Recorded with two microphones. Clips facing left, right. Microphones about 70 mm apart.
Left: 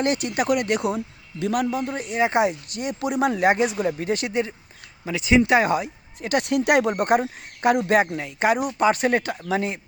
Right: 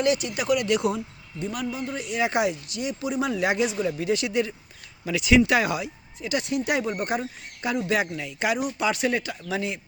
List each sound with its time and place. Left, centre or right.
0.0 s speech: left
1.4 s speech: left
2.6 s speech: left
6.1 s speech: left